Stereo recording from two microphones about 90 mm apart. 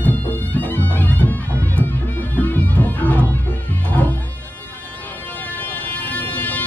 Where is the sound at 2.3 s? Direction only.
20° left (ahead or behind).